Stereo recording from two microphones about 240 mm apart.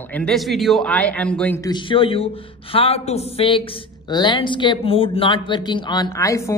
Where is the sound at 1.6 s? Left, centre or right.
Centre.